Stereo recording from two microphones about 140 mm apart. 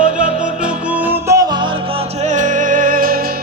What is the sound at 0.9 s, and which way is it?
Music, 10° right (ahead or behind).